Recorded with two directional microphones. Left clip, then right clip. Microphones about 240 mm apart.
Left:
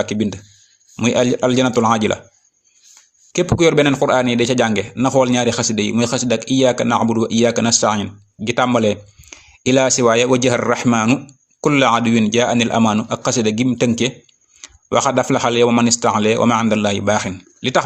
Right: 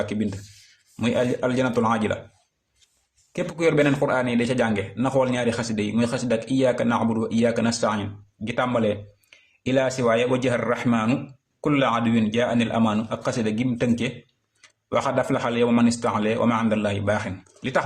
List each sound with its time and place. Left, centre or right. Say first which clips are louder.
0.0 s a man's voice: left 7 dB; left
3.3 s a man's voice: left 7 dB; left